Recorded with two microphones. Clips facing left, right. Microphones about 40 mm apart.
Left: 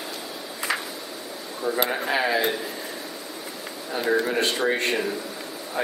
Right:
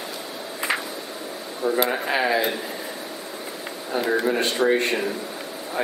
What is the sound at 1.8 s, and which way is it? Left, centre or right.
Speech, centre.